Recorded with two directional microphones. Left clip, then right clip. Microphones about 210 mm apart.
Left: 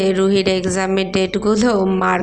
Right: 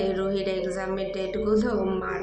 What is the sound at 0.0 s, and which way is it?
A woman's voice, 50° left (ahead or behind).